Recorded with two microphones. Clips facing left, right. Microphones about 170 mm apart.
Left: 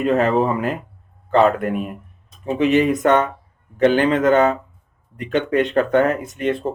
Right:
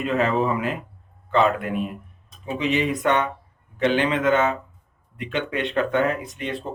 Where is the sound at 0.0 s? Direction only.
40° left (ahead or behind).